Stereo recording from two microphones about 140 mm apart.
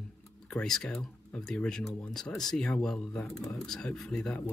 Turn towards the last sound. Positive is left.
turn(degrees=5)  # may be behind; listen again after turning